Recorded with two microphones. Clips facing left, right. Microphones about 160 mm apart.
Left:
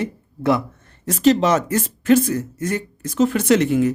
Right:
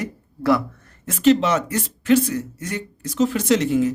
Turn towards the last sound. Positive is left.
turn(degrees=60)  # may be behind; listen again after turning